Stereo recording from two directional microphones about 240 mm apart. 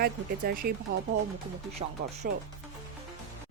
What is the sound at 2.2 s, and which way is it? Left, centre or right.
Speech, right.